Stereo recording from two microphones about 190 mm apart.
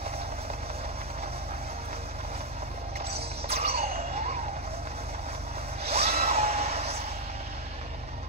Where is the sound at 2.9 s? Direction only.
30° right (ahead or behind).